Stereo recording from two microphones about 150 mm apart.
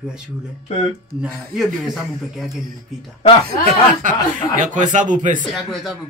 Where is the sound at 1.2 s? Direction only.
Centre (ahead or behind).